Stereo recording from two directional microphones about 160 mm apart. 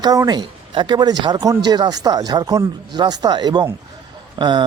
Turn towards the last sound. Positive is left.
turn(degrees=-30)  # may be behind; listen again after turning